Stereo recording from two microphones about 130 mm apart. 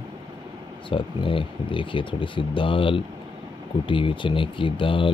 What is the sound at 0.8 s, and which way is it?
Speech, 40° left (ahead or behind).